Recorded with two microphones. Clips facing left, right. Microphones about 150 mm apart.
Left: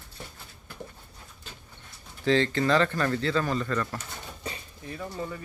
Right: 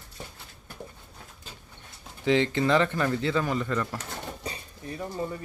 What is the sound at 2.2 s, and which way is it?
Speech, 15° right (ahead or behind).